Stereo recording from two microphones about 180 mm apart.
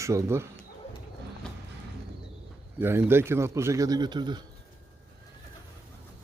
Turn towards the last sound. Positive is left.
turn(degrees=-25)  # may be behind; listen again after turning